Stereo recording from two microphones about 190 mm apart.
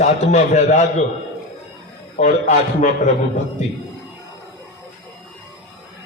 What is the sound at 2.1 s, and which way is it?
Speech, 40° left (ahead or behind).